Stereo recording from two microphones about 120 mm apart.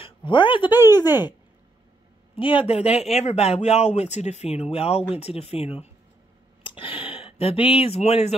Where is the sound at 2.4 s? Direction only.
45° left (ahead or behind).